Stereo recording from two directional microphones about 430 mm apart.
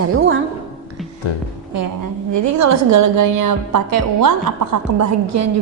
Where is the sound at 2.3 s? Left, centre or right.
Right.